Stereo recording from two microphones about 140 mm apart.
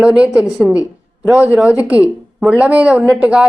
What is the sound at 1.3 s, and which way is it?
A woman's voice, 15° right (ahead or behind).